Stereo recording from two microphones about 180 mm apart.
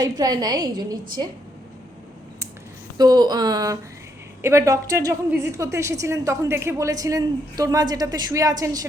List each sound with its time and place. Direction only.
0.0 s a woman's voice: 20° right (ahead or behind)
3.0 s a woman's voice: 20° right (ahead or behind)